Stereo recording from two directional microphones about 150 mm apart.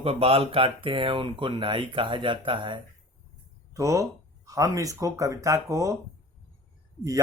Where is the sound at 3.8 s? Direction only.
20° right (ahead or behind).